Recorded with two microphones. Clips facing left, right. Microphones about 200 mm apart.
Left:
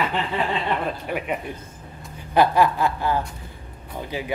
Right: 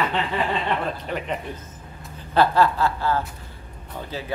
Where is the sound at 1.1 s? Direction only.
10° left (ahead or behind).